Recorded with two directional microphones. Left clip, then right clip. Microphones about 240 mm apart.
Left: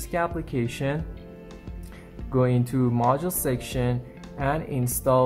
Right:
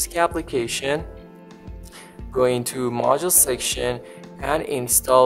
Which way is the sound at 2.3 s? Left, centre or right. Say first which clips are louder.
Right 4 dB; right.